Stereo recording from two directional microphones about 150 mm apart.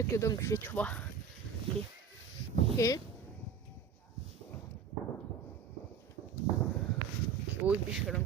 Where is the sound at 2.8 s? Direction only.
20° left (ahead or behind).